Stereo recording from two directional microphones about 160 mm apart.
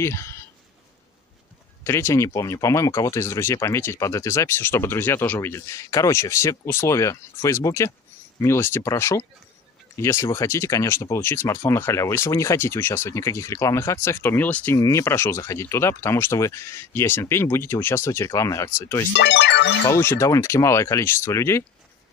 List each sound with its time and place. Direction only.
0.0 s speech: 15° left (ahead or behind)
1.9 s speech: 15° left (ahead or behind)
19.1 s speech: 90° left
19.9 s speech: 15° left (ahead or behind)